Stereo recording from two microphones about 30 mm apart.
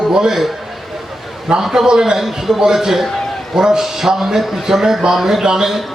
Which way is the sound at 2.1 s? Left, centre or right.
Centre.